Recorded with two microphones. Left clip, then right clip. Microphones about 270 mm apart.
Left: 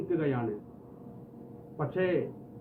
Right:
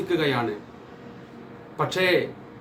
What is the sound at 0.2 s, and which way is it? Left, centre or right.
Speech, centre.